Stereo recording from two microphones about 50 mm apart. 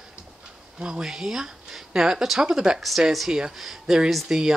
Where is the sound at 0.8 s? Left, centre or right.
Centre.